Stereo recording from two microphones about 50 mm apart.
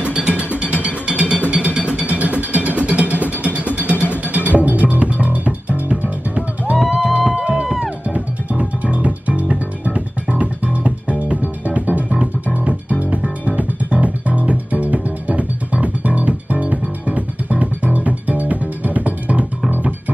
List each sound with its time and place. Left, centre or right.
0.0 s music: right
7.2 s music: centre
8.1 s music: right